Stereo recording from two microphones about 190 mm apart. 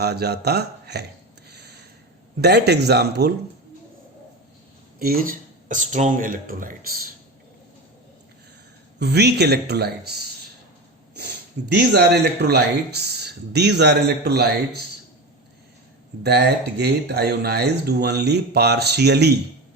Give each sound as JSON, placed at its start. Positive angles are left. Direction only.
{"t": 0.0, "sound": "speech", "side_deg": -60}
{"t": 1.5, "sound": "a sound", "side_deg": -60}
{"t": 2.4, "sound": "speech", "side_deg": -60}
{"t": 4.9, "sound": "speech", "side_deg": -50}
{"t": 9.0, "sound": "speech", "side_deg": -60}
{"t": 16.2, "sound": "speech", "side_deg": -60}